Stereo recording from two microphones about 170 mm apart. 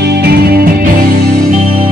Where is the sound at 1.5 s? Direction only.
40° right (ahead or behind).